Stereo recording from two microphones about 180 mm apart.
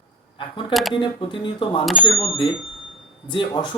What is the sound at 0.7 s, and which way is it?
Speech, centre (ahead or behind).